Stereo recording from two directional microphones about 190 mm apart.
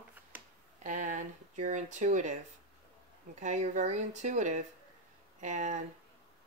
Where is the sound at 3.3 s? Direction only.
40° right (ahead or behind).